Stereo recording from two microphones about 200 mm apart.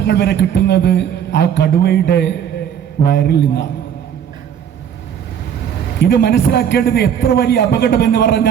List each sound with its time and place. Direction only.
0.0 s a man's voice: 55° left (ahead or behind)
6.0 s a man's voice: 55° left (ahead or behind)